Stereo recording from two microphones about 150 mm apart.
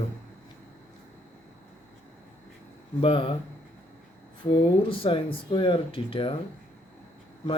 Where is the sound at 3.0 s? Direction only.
40° left (ahead or behind).